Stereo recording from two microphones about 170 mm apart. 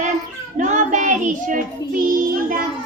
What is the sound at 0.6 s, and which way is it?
A child's voice, 45° right (ahead or behind).